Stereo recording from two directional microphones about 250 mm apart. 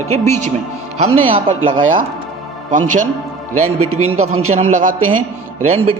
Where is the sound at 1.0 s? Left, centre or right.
Right.